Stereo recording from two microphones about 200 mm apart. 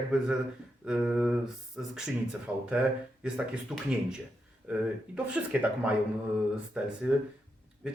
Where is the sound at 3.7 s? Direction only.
5° right (ahead or behind).